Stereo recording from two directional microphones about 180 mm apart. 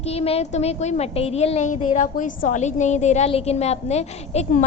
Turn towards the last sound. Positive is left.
turn(degrees=40)  # may be behind; listen again after turning